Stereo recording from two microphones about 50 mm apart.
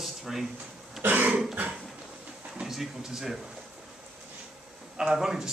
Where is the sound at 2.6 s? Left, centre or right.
Centre.